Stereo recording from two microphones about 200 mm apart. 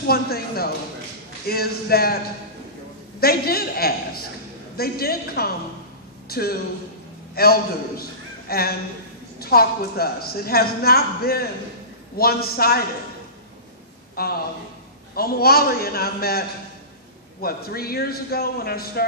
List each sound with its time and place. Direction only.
0.0 s a woman's voice: 50° left (ahead or behind)
3.2 s a woman's voice: 50° left (ahead or behind)
14.1 s a man's voice: 50° left (ahead or behind)